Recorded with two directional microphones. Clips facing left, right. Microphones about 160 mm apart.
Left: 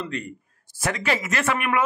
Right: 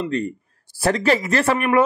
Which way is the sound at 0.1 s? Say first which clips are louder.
Right 8 dB; 35° right (ahead or behind).